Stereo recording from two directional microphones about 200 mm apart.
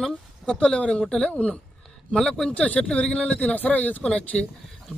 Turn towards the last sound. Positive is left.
turn(degrees=5)  # may be behind; listen again after turning